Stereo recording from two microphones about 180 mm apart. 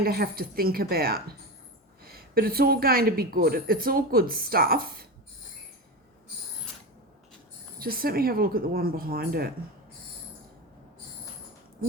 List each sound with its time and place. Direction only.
0.0 s a woman's voice: 60° right (ahead or behind)
7.8 s a woman's voice: 55° right (ahead or behind)